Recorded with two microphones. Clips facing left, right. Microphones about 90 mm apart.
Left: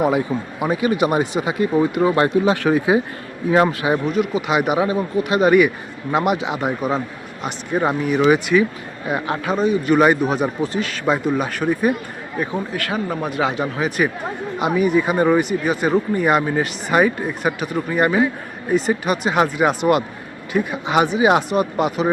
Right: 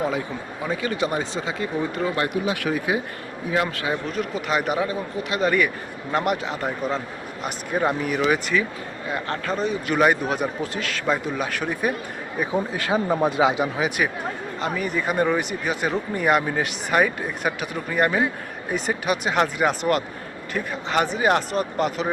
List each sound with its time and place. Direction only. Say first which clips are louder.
0.6 s a man's voice: left 6 dB; 15° left (ahead or behind); by 2.8 s 35° left (ahead or behind)
3.7 s speech: left 7 dB; 20° left (ahead or behind)
4.1 s speech: left 5 dB; 5° left (ahead or behind)
4.8 s speech: left 6 dB; 20° left (ahead or behind)
5.4 s a man's voice: left 7 dB; 10° left (ahead or behind)
12.7 s speech: right 1 dB; 25° right (ahead or behind)
13.7 s speech: left 3 dB; 5° right (ahead or behind)
14.6 s speech: left 8 dB; 10° left (ahead or behind)